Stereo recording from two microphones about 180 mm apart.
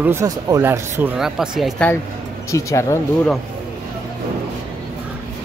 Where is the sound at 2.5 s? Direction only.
15° left (ahead or behind).